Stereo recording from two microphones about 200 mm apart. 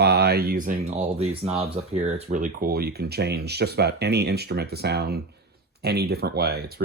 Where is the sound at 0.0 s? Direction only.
55° right (ahead or behind).